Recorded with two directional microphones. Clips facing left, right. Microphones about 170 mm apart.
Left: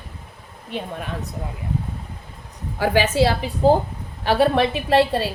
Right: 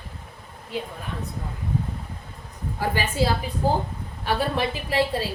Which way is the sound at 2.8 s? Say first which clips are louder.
Left 7 dB; 85° left.